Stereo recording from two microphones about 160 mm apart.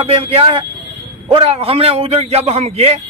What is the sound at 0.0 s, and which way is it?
A man's voice, 35° right (ahead or behind).